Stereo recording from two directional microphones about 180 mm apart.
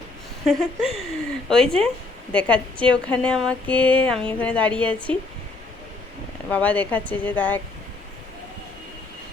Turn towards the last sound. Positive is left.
turn(degrees=10)  # may be behind; listen again after turning